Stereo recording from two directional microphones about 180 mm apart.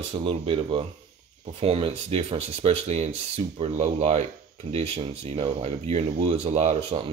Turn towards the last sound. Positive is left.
turn(degrees=-40)  # may be behind; listen again after turning